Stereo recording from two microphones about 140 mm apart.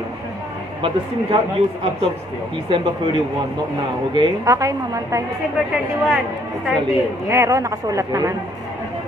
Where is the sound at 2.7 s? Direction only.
30° right (ahead or behind).